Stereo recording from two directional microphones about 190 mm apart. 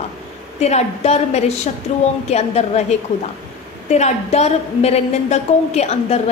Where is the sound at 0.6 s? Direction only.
35° left (ahead or behind).